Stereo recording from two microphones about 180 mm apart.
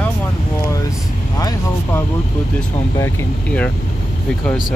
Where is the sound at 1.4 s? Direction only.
15° left (ahead or behind).